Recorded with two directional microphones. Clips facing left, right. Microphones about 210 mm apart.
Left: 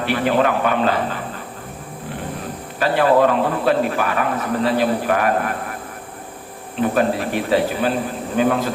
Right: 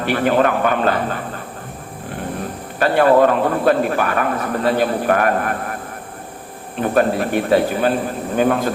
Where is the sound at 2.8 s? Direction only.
50° right (ahead or behind).